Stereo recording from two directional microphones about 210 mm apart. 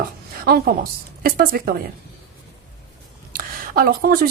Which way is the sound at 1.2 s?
45° right (ahead or behind).